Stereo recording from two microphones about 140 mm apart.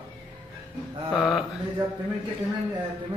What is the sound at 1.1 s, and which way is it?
Speech, centre (ahead or behind).